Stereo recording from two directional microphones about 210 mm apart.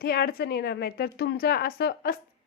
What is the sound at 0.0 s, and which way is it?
A woman's voice, 45° left (ahead or behind).